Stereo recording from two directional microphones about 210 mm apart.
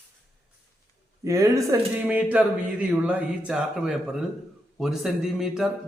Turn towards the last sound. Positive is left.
turn(degrees=0)  # may be behind; listen again after turning